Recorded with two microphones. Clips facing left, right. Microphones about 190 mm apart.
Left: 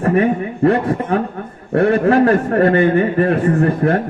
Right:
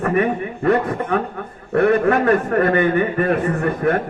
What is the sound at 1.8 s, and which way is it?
A man's voice, 30° left (ahead or behind).